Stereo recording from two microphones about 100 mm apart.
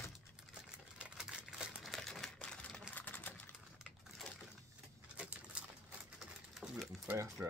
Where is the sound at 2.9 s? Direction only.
15° left (ahead or behind).